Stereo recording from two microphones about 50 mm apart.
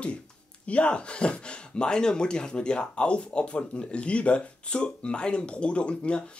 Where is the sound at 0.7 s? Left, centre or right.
Left.